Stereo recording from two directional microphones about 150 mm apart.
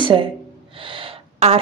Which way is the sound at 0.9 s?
40° right (ahead or behind).